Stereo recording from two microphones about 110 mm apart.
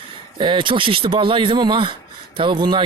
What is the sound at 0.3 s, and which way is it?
Speech, 50° right (ahead or behind).